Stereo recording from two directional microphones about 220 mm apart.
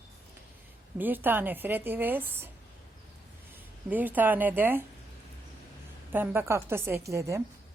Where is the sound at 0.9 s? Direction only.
10° right (ahead or behind).